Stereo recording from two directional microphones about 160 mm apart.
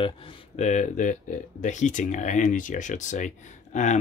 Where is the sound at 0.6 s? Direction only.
50° left (ahead or behind).